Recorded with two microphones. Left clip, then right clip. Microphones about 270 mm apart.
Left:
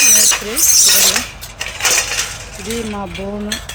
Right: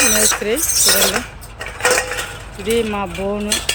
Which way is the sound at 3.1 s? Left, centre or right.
Right.